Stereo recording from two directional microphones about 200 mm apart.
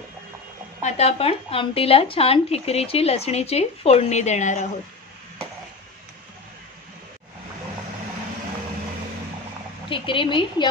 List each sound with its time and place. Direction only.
0.8 s speech: 30° left (ahead or behind)
9.8 s a woman's voice: 25° left (ahead or behind)